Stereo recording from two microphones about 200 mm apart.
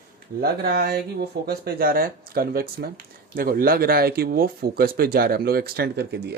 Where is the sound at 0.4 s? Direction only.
50° right (ahead or behind).